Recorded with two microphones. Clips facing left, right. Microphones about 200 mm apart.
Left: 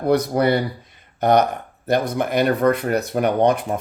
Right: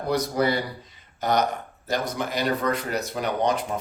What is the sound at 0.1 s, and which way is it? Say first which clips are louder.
Speech: left 6 dB; 60° left (ahead or behind).